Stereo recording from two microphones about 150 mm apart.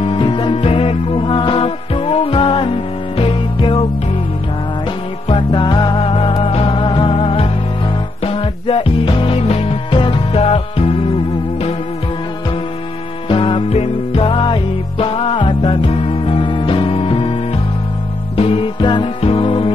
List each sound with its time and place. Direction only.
0.0 s music: 35° left (ahead or behind)
5.3 s music: 30° left (ahead or behind)
13.3 s music: 35° left (ahead or behind)
18.3 s music: 40° left (ahead or behind)